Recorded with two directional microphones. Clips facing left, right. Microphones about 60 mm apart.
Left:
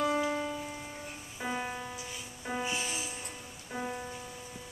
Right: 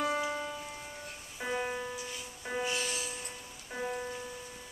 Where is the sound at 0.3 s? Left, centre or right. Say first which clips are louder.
Left 3 dB; centre.